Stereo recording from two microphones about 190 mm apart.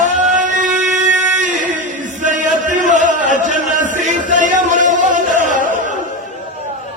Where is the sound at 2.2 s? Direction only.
40° right (ahead or behind).